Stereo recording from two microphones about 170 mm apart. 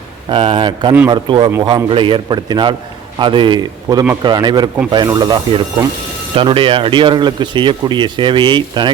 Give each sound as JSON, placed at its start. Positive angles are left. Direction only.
{"t": 0.3, "sound": "speech", "side_deg": -30}